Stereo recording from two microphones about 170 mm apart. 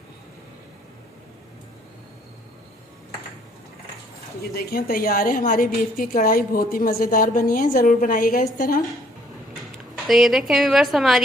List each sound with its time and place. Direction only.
4.4 s a woman's voice: 65° left (ahead or behind)
10.1 s a woman's voice: centre (ahead or behind)